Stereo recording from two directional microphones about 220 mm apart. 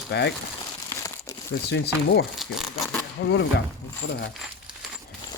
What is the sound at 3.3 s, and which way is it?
Speech, 50° left (ahead or behind).